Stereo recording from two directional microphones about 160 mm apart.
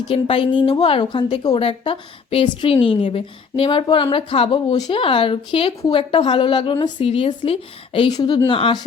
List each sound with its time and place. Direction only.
0.1 s a woman's voice: 35° left (ahead or behind)